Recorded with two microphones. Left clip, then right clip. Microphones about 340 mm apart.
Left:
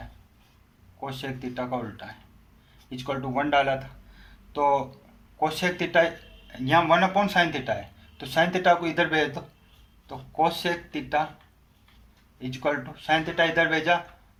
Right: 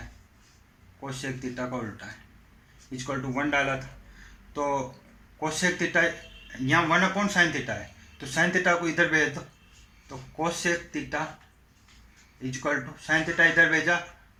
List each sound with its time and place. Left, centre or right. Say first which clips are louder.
1.0 s speech: left 1 dB; left
3.1 s speech: left 3 dB; left
10.3 s speech: left 3 dB; left
12.4 s speech: left 1 dB; left